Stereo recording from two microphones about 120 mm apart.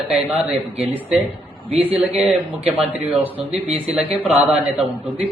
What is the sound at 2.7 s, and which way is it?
Speech, 55° right (ahead or behind).